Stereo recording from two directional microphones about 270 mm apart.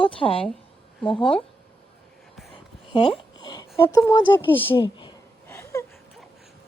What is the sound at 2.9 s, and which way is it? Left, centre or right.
Speech, centre.